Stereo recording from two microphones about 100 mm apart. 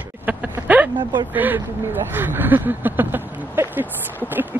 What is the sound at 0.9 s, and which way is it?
Speech, 50° right (ahead or behind).